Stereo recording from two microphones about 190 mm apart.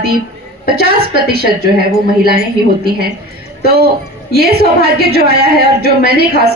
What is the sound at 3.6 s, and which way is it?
A woman's voice, 55° right (ahead or behind).